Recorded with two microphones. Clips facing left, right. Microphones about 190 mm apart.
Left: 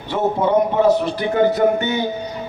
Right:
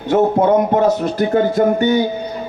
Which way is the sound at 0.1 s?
45° right (ahead or behind).